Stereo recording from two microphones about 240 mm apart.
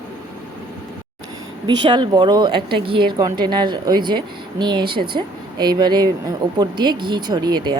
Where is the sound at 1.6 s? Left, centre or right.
Centre.